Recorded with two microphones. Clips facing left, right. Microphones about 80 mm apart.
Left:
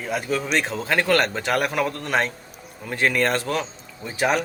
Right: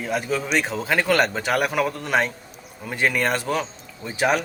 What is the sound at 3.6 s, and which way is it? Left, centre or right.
Speech, centre.